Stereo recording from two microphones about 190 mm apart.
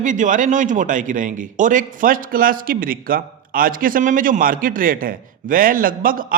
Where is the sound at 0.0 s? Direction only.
40° right (ahead or behind).